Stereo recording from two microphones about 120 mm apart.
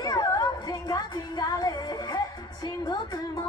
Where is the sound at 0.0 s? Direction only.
35° left (ahead or behind).